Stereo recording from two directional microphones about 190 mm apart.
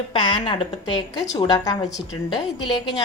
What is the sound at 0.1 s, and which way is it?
A woman's voice, 25° left (ahead or behind).